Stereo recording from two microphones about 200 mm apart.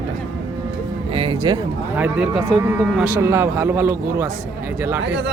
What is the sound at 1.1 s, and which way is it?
Speech, 25° right (ahead or behind).